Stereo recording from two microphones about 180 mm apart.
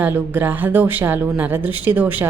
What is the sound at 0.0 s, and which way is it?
A woman's voice, 10° right (ahead or behind).